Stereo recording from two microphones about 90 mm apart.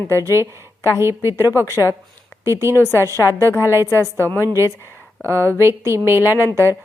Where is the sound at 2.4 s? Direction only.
30° right (ahead or behind).